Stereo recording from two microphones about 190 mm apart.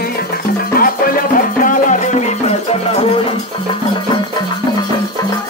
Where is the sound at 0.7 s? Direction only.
50° left (ahead or behind).